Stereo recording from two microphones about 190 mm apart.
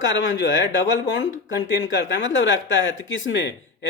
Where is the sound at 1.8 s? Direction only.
75° left (ahead or behind).